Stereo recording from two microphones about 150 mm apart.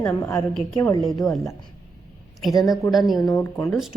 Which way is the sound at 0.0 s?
20° left (ahead or behind).